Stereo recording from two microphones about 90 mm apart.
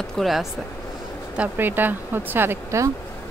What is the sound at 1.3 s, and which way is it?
Speech, 20° right (ahead or behind).